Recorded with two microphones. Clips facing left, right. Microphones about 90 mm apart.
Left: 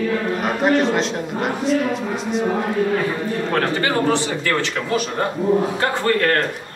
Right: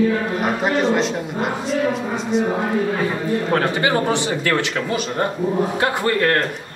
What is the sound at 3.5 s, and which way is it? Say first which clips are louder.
A man's voice: right 1 dB; 15° right (ahead or behind).